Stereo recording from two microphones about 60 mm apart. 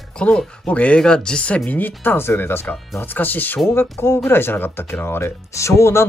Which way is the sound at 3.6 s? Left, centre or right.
Left.